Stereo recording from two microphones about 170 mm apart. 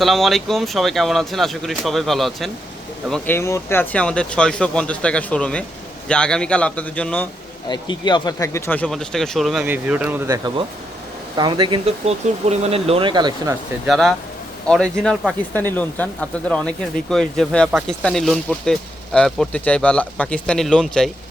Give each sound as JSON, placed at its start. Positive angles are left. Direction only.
{"t": 0.0, "sound": "speech", "side_deg": 0}
{"t": 3.1, "sound": "speech", "side_deg": 10}
{"t": 7.7, "sound": "speech", "side_deg": 25}
{"t": 13.8, "sound": "speech", "side_deg": 0}
{"t": 15.5, "sound": "speech", "side_deg": 10}